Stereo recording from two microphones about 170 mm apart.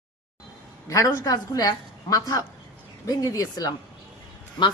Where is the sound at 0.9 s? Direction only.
20° left (ahead or behind).